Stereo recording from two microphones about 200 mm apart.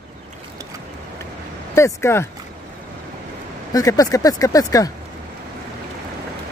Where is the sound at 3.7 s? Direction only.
15° left (ahead or behind).